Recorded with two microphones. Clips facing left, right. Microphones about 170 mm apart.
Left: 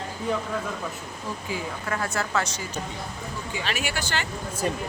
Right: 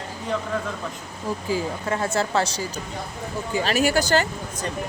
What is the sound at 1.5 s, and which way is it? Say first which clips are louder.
Speech: right 5 dB; 30° right (ahead or behind).